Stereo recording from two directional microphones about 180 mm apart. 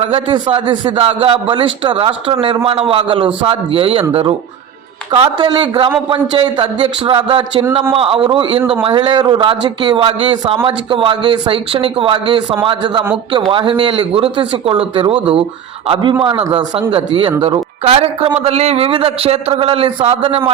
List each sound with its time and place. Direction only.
0.0 s a man's voice: 30° right (ahead or behind)